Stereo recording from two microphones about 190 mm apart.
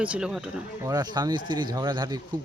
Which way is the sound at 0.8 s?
20° right (ahead or behind).